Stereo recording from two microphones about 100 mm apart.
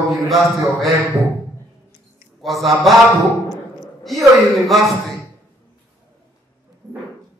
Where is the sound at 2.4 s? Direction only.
Centre (ahead or behind).